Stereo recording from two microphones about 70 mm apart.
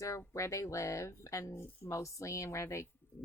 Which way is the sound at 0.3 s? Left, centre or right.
Left.